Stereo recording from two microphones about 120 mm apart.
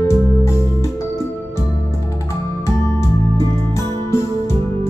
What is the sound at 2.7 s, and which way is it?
Music, 25° left (ahead or behind).